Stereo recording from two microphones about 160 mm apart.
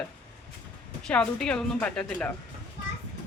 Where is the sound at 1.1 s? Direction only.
5° left (ahead or behind).